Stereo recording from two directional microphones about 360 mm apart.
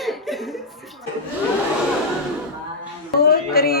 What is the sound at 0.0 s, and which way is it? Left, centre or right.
Chuckle, centre.